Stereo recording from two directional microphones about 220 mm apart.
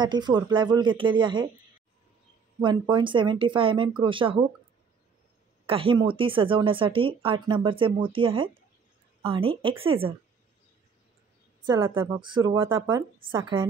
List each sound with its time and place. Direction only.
0.0 s speech: 20° right (ahead or behind)
2.6 s speech: 20° right (ahead or behind)
5.7 s speech: 25° right (ahead or behind)
11.6 s a woman's voice: 15° right (ahead or behind)